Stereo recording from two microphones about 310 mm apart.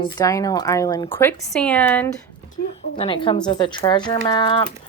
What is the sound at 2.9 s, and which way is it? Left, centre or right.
Speech, centre.